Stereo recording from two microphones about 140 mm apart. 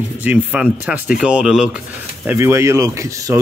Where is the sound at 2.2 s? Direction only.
20° right (ahead or behind).